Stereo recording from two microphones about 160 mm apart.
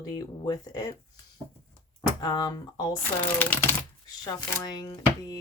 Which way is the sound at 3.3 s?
15° left (ahead or behind).